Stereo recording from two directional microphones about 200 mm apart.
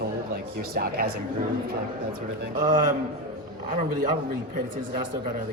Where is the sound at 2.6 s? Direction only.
40° right (ahead or behind).